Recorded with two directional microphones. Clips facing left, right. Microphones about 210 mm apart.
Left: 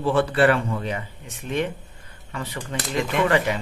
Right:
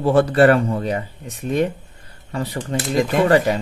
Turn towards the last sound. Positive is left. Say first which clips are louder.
# right 5 dB
turn(degrees=-40)  # may be behind; listen again after turning